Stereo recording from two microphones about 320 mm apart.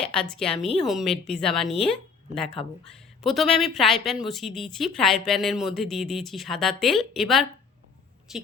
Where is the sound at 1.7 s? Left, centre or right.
Centre.